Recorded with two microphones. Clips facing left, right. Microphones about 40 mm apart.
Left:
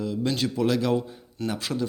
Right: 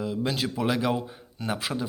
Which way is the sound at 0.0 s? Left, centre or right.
Centre.